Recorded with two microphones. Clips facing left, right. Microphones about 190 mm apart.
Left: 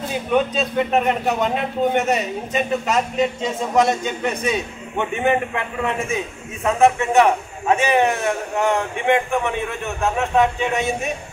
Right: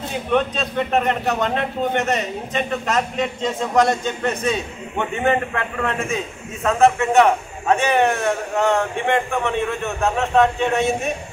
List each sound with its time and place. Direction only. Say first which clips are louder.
0.3 s a man's voice: left 1 dB; 5° left (ahead or behind)
4.5 s a man's voice: even; 15° left (ahead or behind)